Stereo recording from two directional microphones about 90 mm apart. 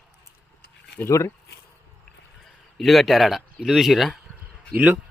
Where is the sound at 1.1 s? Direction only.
35° left (ahead or behind).